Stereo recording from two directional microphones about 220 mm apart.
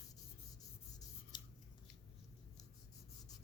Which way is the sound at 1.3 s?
20° left (ahead or behind).